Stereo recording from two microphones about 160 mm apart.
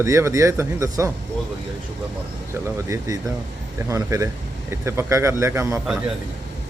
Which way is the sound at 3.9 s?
20° right (ahead or behind).